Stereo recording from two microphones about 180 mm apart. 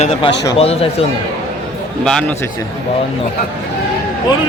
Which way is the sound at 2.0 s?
5° left (ahead or behind).